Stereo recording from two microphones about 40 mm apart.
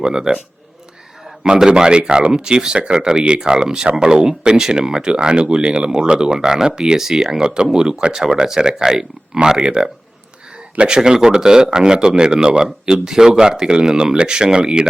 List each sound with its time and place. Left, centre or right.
0.0 s speech: centre
1.5 s speech: centre